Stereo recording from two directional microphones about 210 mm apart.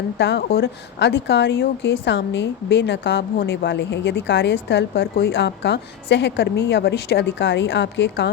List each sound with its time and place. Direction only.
0.2 s speech: 55° left (ahead or behind)